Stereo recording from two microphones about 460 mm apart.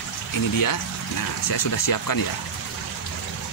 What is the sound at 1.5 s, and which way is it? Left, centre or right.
Speech, left.